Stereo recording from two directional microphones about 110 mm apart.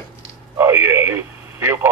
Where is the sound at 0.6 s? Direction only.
20° right (ahead or behind).